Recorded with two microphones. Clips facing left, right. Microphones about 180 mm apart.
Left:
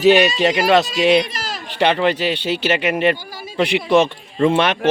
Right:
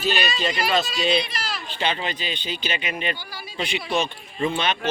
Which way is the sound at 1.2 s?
45° left (ahead or behind).